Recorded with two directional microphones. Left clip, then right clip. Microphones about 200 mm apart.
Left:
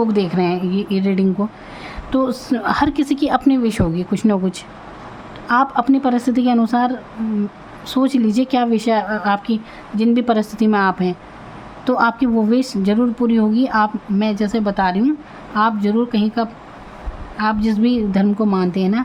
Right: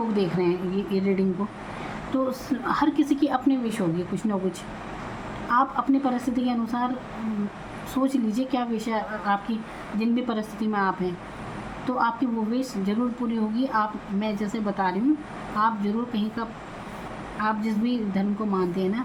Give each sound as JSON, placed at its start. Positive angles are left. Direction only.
{"t": 0.1, "sound": "a woman's voice", "side_deg": 50}
{"t": 5.5, "sound": "a woman's voice", "side_deg": 50}
{"t": 8.0, "sound": "a woman's voice", "side_deg": 50}